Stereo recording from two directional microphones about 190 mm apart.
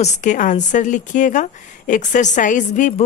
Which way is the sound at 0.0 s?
40° left (ahead or behind).